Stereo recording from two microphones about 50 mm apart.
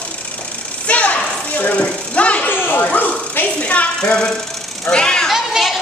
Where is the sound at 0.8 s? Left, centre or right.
Left.